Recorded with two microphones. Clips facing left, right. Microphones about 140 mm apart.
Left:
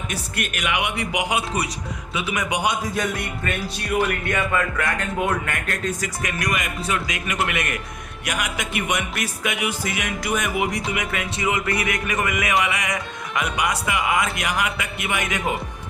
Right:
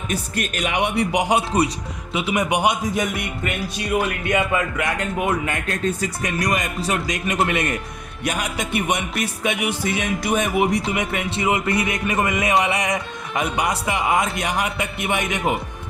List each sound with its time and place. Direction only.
0.1 s speech: 35° right (ahead or behind)
2.1 s music: 30° right (ahead or behind)